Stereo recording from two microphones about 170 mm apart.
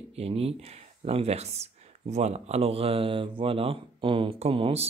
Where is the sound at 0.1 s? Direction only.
35° right (ahead or behind).